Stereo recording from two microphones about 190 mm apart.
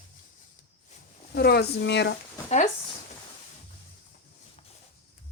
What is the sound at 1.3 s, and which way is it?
Speech, 55° left (ahead or behind).